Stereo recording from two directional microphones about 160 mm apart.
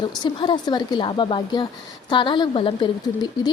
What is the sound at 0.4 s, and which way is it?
A woman's voice, 30° left (ahead or behind).